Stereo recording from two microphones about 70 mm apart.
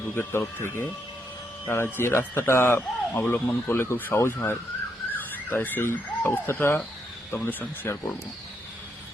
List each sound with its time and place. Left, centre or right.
0.2 s speech: left